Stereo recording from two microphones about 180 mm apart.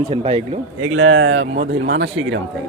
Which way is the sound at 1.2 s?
90° right.